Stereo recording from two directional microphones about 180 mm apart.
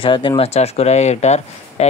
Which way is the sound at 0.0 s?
30° left (ahead or behind).